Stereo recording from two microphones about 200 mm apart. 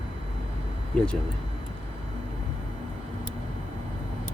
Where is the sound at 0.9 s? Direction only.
5° left (ahead or behind).